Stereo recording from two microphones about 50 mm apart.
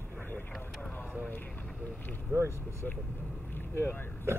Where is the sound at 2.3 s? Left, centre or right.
Right.